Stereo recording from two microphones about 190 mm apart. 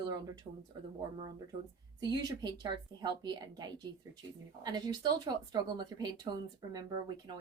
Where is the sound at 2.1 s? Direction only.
20° right (ahead or behind).